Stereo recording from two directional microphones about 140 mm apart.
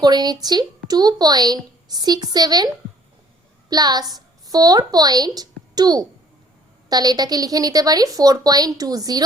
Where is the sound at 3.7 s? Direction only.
30° right (ahead or behind).